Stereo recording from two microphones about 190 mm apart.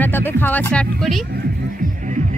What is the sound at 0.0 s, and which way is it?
Speech, 10° left (ahead or behind).